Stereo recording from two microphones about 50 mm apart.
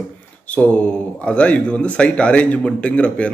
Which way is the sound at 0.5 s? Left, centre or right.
Left.